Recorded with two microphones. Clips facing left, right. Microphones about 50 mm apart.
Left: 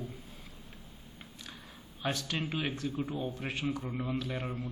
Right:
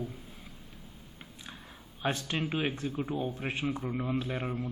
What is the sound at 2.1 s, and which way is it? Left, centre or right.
Speech, right.